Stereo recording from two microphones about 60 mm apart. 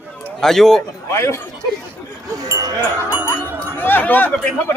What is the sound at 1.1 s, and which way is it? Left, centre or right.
Speech, left.